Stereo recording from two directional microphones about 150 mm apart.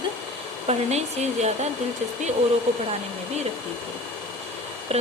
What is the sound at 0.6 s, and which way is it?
Speech, 45° right (ahead or behind).